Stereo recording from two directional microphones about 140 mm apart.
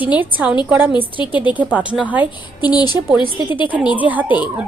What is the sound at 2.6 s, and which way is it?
Speech, 30° left (ahead or behind).